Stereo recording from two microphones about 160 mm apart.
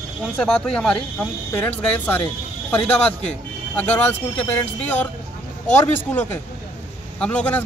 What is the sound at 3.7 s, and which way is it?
Speech, 10° left (ahead or behind).